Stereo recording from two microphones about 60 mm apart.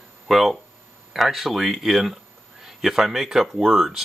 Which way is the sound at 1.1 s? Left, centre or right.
Centre.